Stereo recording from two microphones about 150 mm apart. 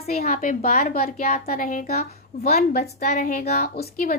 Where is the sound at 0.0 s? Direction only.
45° left (ahead or behind).